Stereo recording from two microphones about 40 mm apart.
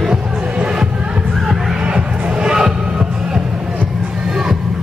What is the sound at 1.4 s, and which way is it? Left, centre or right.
Crowd, centre.